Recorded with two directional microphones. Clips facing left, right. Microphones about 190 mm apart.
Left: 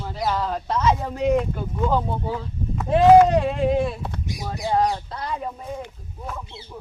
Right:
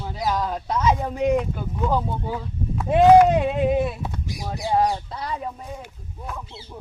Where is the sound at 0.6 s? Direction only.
Centre (ahead or behind).